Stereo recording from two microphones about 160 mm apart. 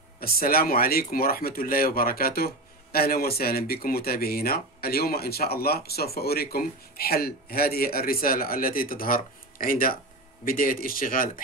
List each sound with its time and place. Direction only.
0.2 s speech: 70° left (ahead or behind)